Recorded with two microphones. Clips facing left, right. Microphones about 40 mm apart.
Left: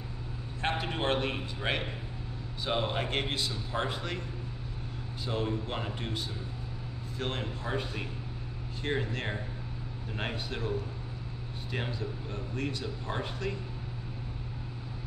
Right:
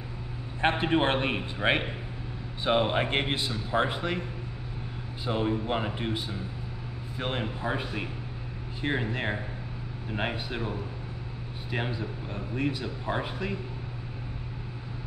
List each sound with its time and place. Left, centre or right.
0.6 s a man's voice: right
5.2 s a man's voice: centre